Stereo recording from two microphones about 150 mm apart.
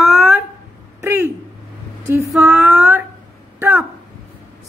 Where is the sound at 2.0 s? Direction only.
15° right (ahead or behind).